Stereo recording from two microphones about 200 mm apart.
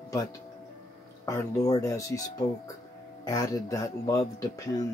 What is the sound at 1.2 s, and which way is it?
Speech, 15° left (ahead or behind).